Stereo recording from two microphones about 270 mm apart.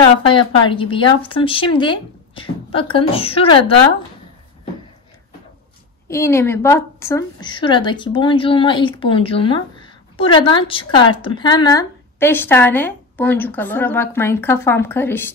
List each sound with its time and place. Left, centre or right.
0.3 s speech: centre
6.0 s a woman's voice: centre